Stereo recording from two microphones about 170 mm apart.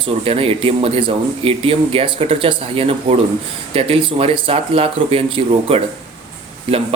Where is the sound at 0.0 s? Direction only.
35° right (ahead or behind).